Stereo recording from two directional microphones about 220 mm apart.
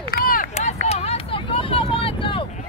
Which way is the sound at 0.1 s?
40° left (ahead or behind).